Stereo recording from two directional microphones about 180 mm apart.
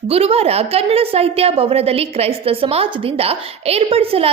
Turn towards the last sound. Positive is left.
turn(degrees=-30)  # may be behind; listen again after turning